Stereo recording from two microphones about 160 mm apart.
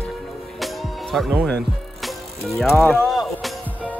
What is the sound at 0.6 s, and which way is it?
Music, centre (ahead or behind).